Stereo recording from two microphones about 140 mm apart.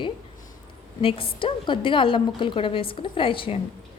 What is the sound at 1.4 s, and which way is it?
A woman's voice, 35° left (ahead or behind).